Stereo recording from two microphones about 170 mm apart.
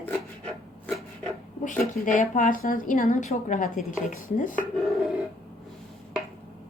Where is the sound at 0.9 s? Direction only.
5° left (ahead or behind).